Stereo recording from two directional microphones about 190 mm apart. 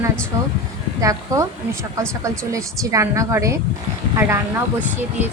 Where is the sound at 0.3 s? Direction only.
15° right (ahead or behind).